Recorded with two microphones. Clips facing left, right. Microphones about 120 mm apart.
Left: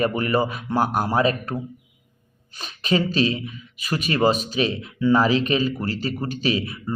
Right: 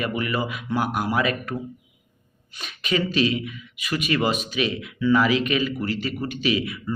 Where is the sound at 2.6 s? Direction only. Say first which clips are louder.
Left 3 dB; 35° left (ahead or behind).